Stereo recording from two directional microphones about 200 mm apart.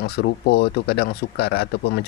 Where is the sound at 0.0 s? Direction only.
55° left (ahead or behind).